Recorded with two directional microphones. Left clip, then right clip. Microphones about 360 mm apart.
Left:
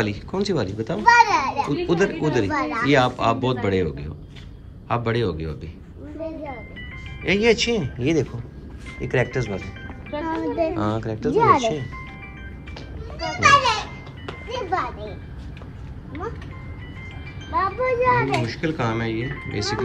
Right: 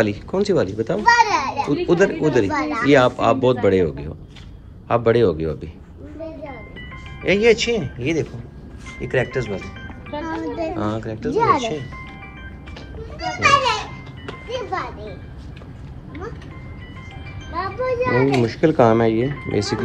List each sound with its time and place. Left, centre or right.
0.0 s a child's voice: centre
7.2 s a child's voice: centre
13.7 s ice cream truck: centre
17.6 s a child's voice: centre
18.4 s a child's voice: centre